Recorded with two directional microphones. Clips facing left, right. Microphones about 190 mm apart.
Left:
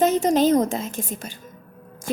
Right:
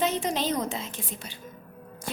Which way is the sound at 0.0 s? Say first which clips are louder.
Left 9 dB; 45° left (ahead or behind).